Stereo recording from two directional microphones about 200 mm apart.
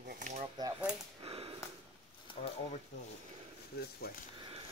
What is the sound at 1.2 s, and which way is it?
Sniff, 30° right (ahead or behind).